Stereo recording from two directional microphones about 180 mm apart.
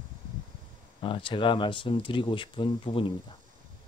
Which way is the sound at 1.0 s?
30° left (ahead or behind).